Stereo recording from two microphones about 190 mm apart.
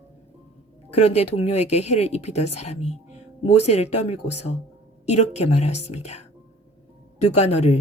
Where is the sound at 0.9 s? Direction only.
35° left (ahead or behind).